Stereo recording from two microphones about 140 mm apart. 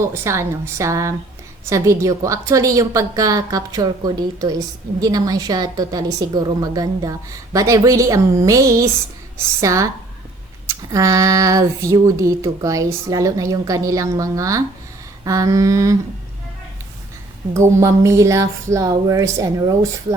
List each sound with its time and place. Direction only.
0.1 s a woman's voice: 20° right (ahead or behind)
17.5 s a woman's voice: 20° right (ahead or behind)